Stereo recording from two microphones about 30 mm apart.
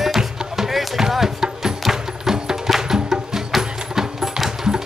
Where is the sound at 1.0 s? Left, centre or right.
Centre.